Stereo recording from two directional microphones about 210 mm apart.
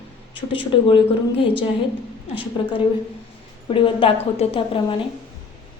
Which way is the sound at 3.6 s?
25° left (ahead or behind).